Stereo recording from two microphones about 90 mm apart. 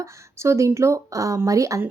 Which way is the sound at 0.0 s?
30° right (ahead or behind).